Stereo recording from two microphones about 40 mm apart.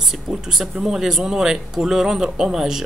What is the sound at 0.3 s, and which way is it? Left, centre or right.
Speech, centre.